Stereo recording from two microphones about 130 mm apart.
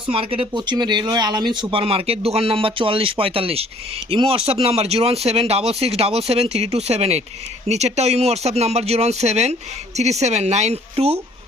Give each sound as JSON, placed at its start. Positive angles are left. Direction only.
{"t": 0.1, "sound": "speech", "side_deg": -45}